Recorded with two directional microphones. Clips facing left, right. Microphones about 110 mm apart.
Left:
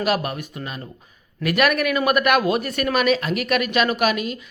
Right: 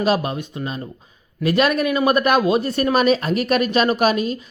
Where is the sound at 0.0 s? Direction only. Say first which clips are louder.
Right 3 dB; 25° right (ahead or behind).